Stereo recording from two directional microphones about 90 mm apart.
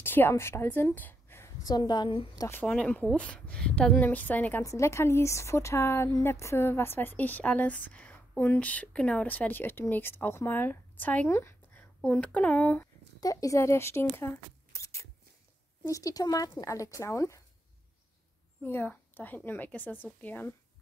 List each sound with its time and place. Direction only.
0.0 s a woman's voice: 25° left (ahead or behind)
1.6 s a woman's voice: 50° left (ahead or behind); by 2.2 s 65° left (ahead or behind)
2.6 s a woman's voice: 10° left (ahead or behind)
4.6 s a woman's voice: 30° left (ahead or behind)
11.2 s speech: 30° left (ahead or behind)
11.7 s a woman's voice: 15° left (ahead or behind)
13.2 s speech: 40° left (ahead or behind)
18.6 s a woman's voice: 20° left (ahead or behind)